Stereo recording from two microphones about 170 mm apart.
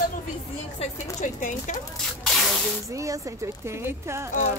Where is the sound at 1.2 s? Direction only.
45° left (ahead or behind).